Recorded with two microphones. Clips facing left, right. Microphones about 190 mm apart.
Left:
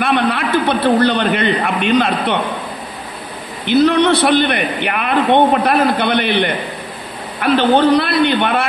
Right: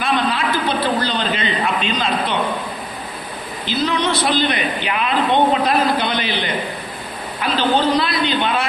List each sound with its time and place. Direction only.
0.0 s a sound: 60° left (ahead or behind)
0.8 s a man's voice: 60° left (ahead or behind)
3.6 s a man's voice: 65° left (ahead or behind)